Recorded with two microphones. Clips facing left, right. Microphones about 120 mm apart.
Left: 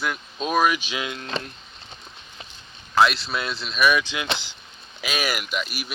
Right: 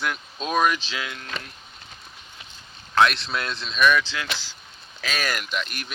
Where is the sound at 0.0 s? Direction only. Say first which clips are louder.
Left 1 dB; centre (ahead or behind); by 1.5 s 30° left (ahead or behind).